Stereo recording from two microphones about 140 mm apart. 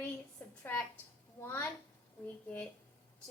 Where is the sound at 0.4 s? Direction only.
15° left (ahead or behind).